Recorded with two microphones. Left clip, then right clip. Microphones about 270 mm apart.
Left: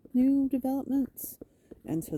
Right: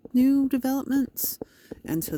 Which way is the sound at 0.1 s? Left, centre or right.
Right.